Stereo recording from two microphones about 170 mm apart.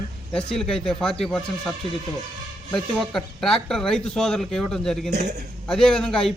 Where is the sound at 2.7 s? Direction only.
5° left (ahead or behind).